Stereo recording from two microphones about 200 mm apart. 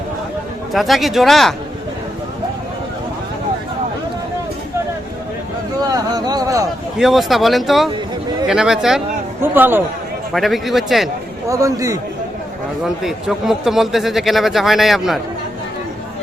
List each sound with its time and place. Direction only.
0.7 s a man's voice: centre (ahead or behind)
5.8 s a sound: 20° right (ahead or behind)
7.0 s a man's voice: centre (ahead or behind)
10.3 s a man's voice: centre (ahead or behind)
11.4 s a man's voice: 15° right (ahead or behind)
12.8 s a man's voice: centre (ahead or behind)